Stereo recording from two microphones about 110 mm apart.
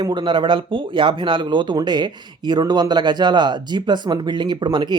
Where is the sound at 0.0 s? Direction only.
45° right (ahead or behind).